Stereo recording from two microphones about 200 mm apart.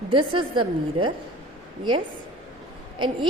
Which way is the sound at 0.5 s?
25° right (ahead or behind).